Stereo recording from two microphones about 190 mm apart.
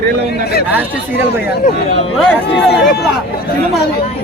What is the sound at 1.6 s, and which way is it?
Speech, 35° left (ahead or behind).